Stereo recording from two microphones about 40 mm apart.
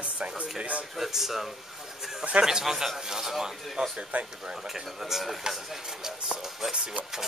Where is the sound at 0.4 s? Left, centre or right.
Right.